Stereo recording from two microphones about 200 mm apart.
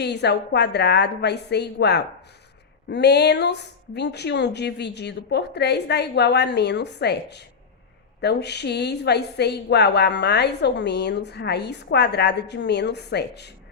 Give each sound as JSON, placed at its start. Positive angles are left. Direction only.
{"t": 0.0, "sound": "a woman's voice", "side_deg": 55}